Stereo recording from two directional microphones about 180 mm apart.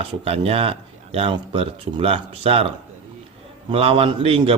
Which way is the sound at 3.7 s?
30° right (ahead or behind).